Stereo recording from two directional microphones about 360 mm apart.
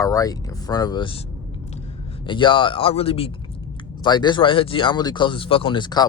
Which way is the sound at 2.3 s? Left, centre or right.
Centre.